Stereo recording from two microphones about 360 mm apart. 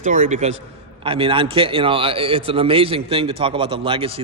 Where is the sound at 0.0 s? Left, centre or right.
Right.